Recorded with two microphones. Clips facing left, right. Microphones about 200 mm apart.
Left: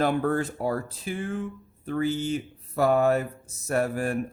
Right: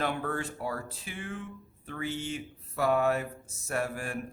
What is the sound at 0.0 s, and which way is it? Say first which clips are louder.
A man's voice: left 8 dB; 40° left (ahead or behind).